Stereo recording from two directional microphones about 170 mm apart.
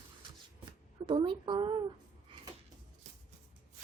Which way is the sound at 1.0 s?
30° right (ahead or behind).